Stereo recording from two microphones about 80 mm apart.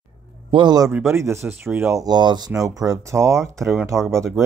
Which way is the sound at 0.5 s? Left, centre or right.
Right.